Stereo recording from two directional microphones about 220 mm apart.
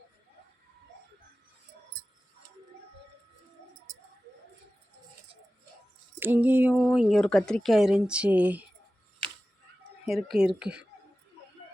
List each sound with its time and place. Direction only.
3.9 s bird: 35° right (ahead or behind)
6.1 s a sound: 10° right (ahead or behind)
6.7 s speech: centre (ahead or behind)
10.1 s speech: centre (ahead or behind)